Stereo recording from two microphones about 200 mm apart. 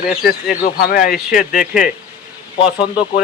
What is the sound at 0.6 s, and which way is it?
Speech, 45° left (ahead or behind).